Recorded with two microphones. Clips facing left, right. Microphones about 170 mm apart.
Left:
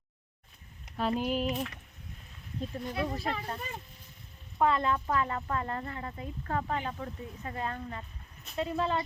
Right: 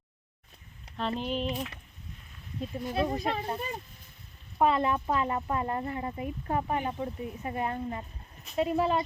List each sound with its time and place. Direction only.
0.9 s a sound: 5° left (ahead or behind)
2.6 s speech: 5° right (ahead or behind)
2.9 s speech: 25° right (ahead or behind)
4.5 s speech: 20° right (ahead or behind)